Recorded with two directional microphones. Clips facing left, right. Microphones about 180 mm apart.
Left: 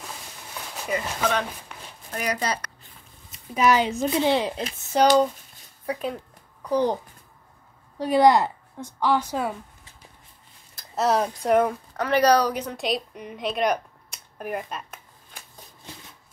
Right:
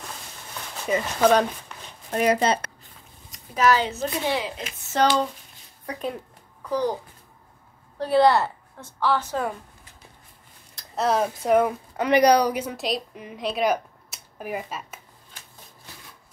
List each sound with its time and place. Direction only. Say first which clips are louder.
0.8 s a woman's voice: right 6 dB; 25° right (ahead or behind)
3.3 s speech: even; 15° left (ahead or behind)
4.4 s a woman's voice: left 4 dB; 35° left (ahead or behind)
4.9 s a woman's voice: left 3 dB; 10° left (ahead or behind)
6.7 s a child's voice: left 2 dB; 20° left (ahead or behind)
8.0 s a woman's voice: left 1 dB; 15° left (ahead or behind)
10.7 s speech: left 1 dB; centre (ahead or behind)
12.0 s speech: right 2 dB; 15° right (ahead or behind)